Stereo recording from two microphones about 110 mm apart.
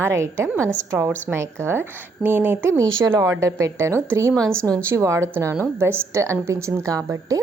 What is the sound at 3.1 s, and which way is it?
A woman's voice, 30° right (ahead or behind).